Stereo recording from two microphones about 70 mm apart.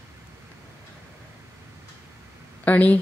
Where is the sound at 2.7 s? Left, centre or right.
Left.